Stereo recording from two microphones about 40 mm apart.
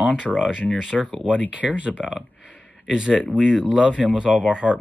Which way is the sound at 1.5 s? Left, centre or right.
Right.